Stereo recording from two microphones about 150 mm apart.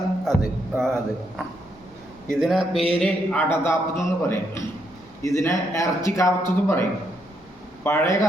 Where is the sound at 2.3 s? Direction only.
Centre (ahead or behind).